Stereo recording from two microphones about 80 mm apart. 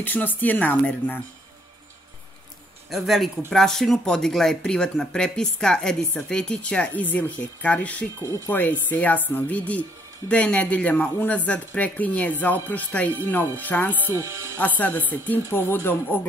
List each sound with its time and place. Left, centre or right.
0.0 s speech: left
2.9 s speech: centre; by 13.9 s left
14.0 s speech: right
14.6 s speech: left